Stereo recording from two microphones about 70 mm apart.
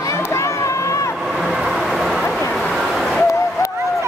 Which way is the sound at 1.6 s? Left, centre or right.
Centre.